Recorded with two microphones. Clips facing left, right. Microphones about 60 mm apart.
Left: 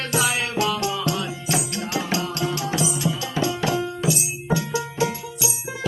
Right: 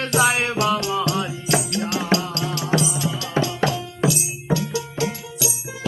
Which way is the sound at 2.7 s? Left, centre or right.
Right.